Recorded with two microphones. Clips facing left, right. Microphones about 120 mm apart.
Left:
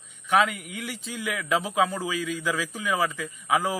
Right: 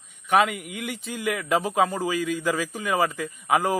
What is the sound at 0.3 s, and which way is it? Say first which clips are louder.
A man's voice: right 2 dB; 55° right (ahead or behind).